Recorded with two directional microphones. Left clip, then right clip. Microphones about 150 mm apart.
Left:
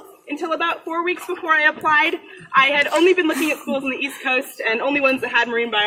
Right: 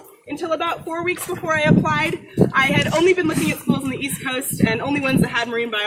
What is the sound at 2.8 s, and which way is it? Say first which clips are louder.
A woman's voice: left 1 dB; 5° left (ahead or behind).